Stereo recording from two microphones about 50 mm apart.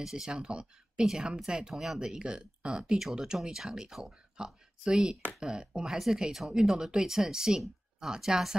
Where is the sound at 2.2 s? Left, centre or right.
Centre.